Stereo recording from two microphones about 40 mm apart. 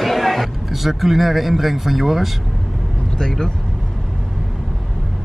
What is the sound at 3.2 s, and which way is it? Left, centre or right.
Speech, centre.